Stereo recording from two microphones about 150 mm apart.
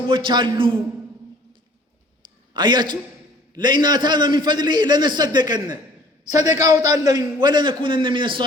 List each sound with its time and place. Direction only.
0.1 s a man's voice: 30° right (ahead or behind)
2.5 s a man's voice: 30° right (ahead or behind)